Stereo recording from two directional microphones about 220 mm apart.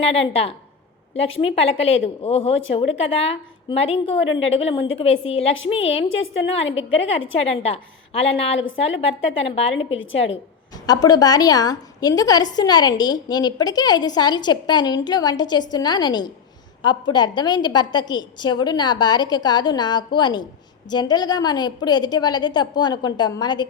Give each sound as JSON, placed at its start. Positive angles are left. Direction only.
{"t": 0.0, "sound": "a woman's voice", "side_deg": 25}
{"t": 9.7, "sound": "a woman's voice", "side_deg": 60}
{"t": 10.8, "sound": "a woman's voice", "side_deg": 15}